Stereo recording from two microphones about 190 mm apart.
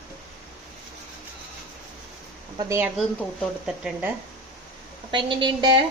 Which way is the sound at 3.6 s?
5° right (ahead or behind).